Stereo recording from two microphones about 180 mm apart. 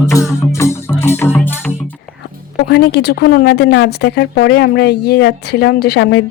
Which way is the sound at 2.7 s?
65° left (ahead or behind).